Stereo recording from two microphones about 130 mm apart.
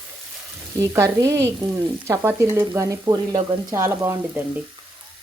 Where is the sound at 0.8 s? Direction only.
25° right (ahead or behind).